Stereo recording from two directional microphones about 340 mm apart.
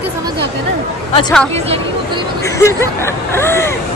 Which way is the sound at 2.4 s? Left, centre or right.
Centre.